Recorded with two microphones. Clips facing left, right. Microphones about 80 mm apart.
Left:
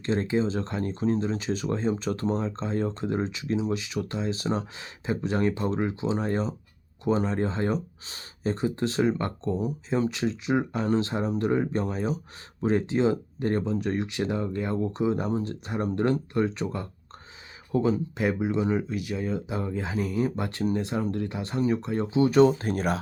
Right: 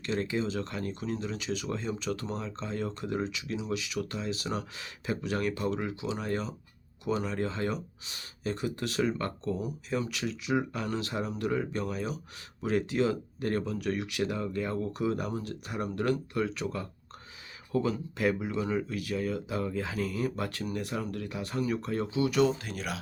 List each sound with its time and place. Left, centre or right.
0.0 s speech: left